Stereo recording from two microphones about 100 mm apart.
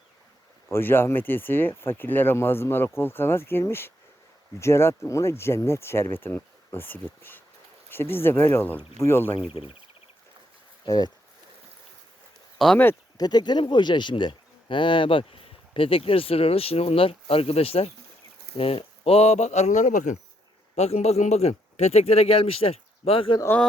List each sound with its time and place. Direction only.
0.7 s speech: 20° left (ahead or behind)
9.5 s speech: 70° left (ahead or behind)
10.8 s speech: 40° left (ahead or behind)
12.5 s speech: 5° left (ahead or behind)
13.1 s speech: 45° left (ahead or behind); by 19.4 s 90° left
20.7 s a man's voice: 90° left; by 23.4 s 65° left (ahead or behind)